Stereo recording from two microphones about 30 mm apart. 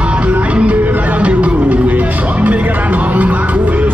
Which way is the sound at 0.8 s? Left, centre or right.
Right.